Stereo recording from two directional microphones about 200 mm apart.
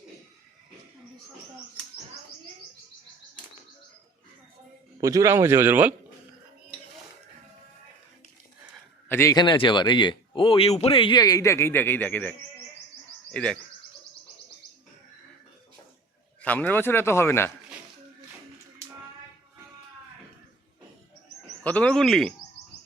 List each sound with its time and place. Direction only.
4.9 s a man's voice: 15° right (ahead or behind)
9.0 s speech: 15° left (ahead or behind)
16.4 s a man's voice: 10° left (ahead or behind)
21.6 s speech: 5° left (ahead or behind)